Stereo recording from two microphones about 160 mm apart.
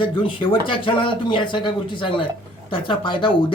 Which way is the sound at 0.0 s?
30° left (ahead or behind).